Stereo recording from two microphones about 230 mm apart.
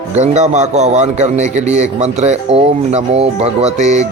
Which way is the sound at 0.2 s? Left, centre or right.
Right.